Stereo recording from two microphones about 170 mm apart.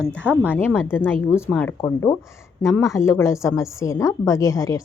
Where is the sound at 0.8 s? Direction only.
10° left (ahead or behind).